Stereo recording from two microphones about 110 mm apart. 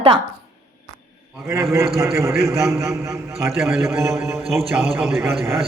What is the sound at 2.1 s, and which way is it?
A man's voice, 25° right (ahead or behind).